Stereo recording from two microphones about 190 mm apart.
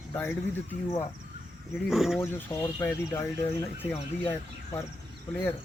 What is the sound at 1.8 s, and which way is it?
Speech, centre (ahead or behind).